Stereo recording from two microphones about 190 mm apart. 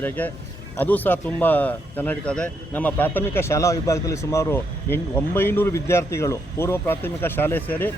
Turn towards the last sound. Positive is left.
turn(degrees=10)  # may be behind; listen again after turning